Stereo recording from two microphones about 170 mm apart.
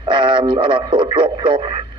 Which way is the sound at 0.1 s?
30° right (ahead or behind).